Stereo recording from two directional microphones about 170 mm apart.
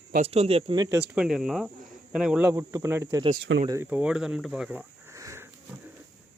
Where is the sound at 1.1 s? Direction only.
5° right (ahead or behind).